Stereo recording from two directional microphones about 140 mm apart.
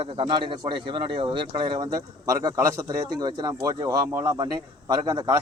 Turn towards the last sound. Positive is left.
turn(degrees=-30)  # may be behind; listen again after turning